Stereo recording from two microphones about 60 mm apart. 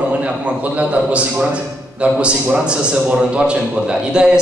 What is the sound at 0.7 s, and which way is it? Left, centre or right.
A man's voice, right.